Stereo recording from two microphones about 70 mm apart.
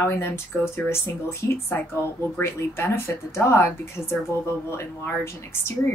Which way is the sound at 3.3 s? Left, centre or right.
Left.